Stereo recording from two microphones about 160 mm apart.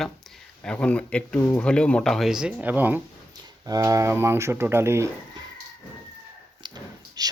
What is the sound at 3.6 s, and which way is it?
Speech, 20° right (ahead or behind).